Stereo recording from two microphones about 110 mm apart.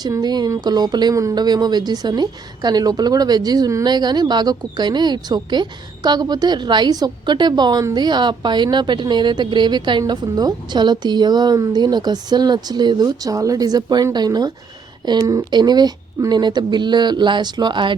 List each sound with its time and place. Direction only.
0.0 s a woman's voice: 40° right (ahead or behind)